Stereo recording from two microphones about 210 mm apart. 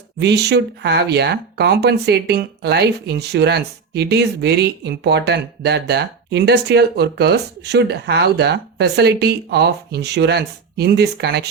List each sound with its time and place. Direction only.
0.2 s speech: 50° right (ahead or behind)